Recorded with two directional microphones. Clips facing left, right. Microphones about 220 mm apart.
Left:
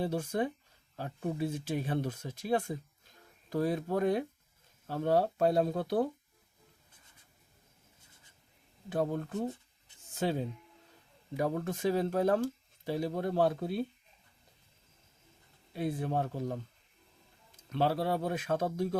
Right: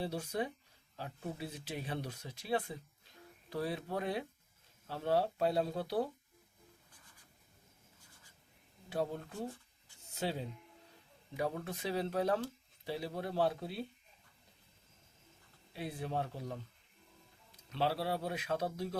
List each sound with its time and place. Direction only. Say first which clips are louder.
0.0 s speech: left 5 dB; 50° left (ahead or behind)
8.9 s speech: left 5 dB; 50° left (ahead or behind)
15.7 s speech: left 6 dB; 50° left (ahead or behind)
17.7 s speech: left 5 dB; 50° left (ahead or behind)